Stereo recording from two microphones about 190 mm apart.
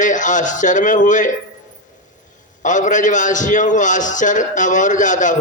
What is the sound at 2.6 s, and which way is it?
A man's voice, 40° left (ahead or behind).